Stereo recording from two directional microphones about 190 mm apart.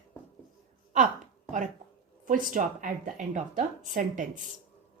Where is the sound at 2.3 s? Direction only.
45° right (ahead or behind).